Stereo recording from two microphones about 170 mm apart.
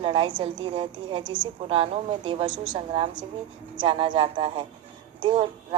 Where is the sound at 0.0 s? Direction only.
30° right (ahead or behind).